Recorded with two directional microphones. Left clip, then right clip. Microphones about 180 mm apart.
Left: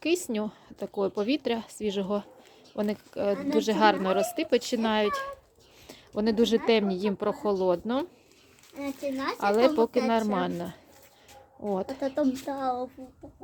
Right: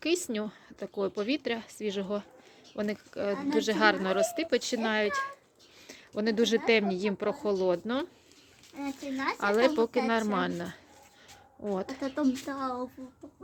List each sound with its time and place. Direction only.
0.0 s speech: 10° left (ahead or behind)
8.8 s a child's voice: 30° right (ahead or behind)
9.1 s speech: 20° right (ahead or behind)
9.4 s a woman's voice: 5° left (ahead or behind)
11.9 s speech: 35° right (ahead or behind)